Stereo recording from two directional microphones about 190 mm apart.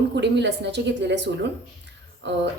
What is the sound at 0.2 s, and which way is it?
A woman's voice, 65° right (ahead or behind).